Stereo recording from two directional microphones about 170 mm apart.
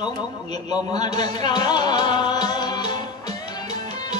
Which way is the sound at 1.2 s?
25° left (ahead or behind).